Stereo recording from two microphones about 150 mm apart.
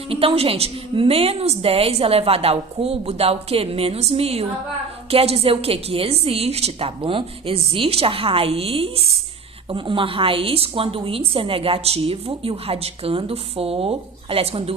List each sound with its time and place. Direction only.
0.1 s a woman's voice: 40° right (ahead or behind)